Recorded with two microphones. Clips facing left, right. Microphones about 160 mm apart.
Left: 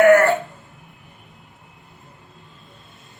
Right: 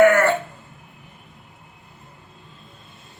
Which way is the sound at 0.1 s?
40° left (ahead or behind).